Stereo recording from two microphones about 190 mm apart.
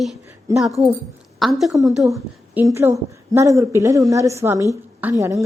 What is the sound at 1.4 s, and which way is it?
Speech, centre (ahead or behind).